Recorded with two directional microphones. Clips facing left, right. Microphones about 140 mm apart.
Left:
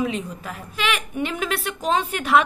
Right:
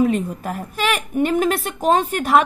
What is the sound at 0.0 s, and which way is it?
A woman's voice, 45° right (ahead or behind).